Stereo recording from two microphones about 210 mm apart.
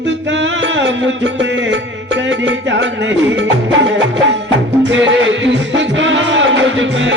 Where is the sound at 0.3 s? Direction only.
60° right (ahead or behind).